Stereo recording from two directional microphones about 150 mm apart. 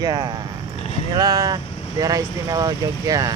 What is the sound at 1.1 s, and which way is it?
Speech, 25° right (ahead or behind).